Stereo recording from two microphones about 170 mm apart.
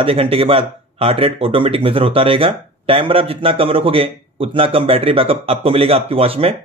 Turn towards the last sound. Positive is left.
turn(degrees=-35)  # may be behind; listen again after turning